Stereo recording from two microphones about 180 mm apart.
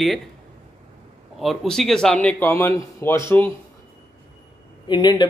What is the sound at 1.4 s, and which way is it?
A man's voice, centre (ahead or behind).